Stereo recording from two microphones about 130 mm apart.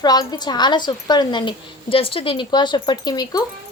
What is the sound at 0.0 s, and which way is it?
A woman's voice, 30° left (ahead or behind).